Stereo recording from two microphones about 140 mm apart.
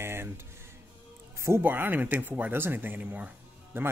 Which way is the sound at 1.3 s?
20° right (ahead or behind).